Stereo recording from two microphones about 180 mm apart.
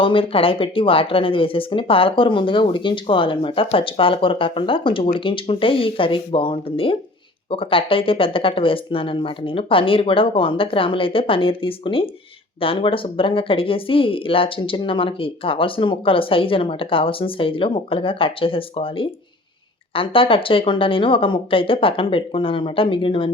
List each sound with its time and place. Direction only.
0.0 s speech: 30° left (ahead or behind)